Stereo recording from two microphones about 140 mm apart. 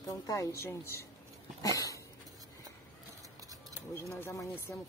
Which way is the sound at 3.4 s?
25° right (ahead or behind).